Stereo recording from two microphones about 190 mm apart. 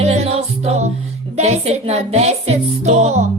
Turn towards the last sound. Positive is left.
turn(degrees=-35)  # may be behind; listen again after turning